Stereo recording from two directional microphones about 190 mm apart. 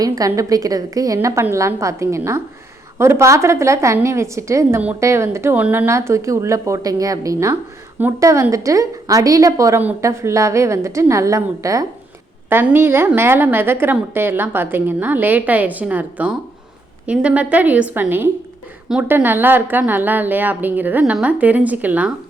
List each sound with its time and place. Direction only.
0.0 s a woman's voice: 20° right (ahead or behind)